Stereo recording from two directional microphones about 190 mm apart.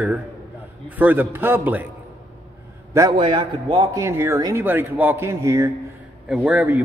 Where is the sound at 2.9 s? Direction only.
25° right (ahead or behind).